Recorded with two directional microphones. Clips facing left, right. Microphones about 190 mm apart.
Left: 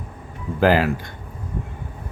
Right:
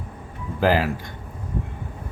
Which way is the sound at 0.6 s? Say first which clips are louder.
Left 3 dB; 65° left (ahead or behind).